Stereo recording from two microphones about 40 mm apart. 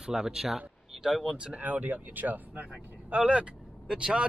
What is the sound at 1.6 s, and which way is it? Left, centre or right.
Speech, right.